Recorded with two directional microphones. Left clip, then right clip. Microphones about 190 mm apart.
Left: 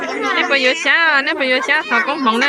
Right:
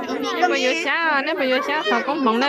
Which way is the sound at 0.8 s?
5° right (ahead or behind).